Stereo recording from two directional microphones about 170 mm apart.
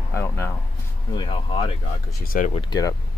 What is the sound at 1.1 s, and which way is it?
Speech, 30° left (ahead or behind).